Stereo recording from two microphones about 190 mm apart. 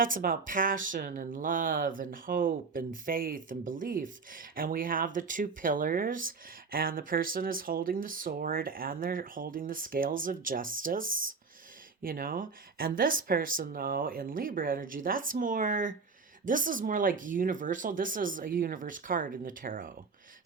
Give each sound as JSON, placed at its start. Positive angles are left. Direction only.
{"t": 0.0, "sound": "speech", "side_deg": -45}